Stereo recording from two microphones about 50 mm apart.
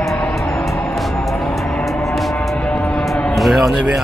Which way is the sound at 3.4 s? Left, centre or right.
Centre.